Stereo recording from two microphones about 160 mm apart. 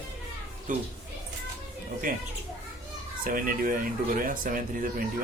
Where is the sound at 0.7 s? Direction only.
55° right (ahead or behind).